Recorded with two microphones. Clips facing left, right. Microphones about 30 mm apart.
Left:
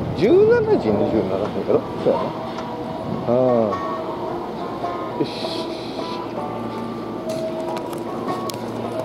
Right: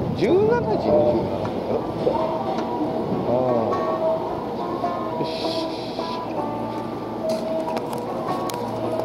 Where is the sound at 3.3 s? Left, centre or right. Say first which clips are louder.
Left 5 dB; left.